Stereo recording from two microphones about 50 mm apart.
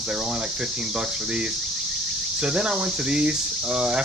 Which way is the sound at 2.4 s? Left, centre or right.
Centre.